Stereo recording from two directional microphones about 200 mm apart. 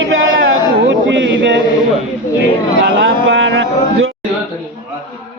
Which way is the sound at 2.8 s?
65° right (ahead or behind).